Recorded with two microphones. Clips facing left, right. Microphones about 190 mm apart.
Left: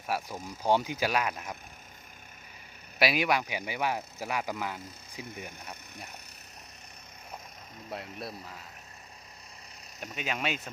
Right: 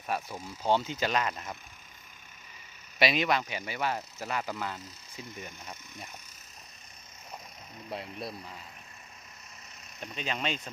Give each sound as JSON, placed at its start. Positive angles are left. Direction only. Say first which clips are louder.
{"t": 0.1, "sound": "speech", "louder": "left 1 dB", "side_deg": 10}
{"t": 3.0, "sound": "speech", "louder": "even", "side_deg": 5}
{"t": 5.9, "sound": "speech", "louder": "even", "side_deg": 65}
{"t": 7.9, "sound": "speech", "louder": "right 1 dB", "side_deg": 0}
{"t": 10.2, "sound": "speech", "louder": "left 1 dB", "side_deg": 5}